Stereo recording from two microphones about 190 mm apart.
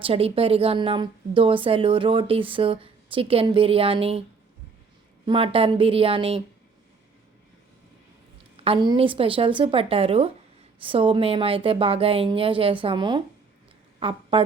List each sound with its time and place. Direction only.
0.0 s a woman's voice: 30° right (ahead or behind)
5.2 s a woman's voice: 25° right (ahead or behind)
8.6 s a woman's voice: 25° right (ahead or behind)